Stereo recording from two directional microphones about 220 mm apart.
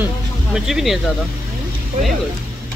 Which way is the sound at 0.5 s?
Centre (ahead or behind).